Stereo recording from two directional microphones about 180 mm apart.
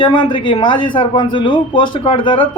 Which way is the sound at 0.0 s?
25° left (ahead or behind).